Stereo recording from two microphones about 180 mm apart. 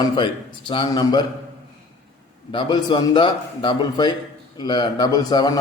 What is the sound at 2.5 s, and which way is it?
A man's voice, 25° left (ahead or behind).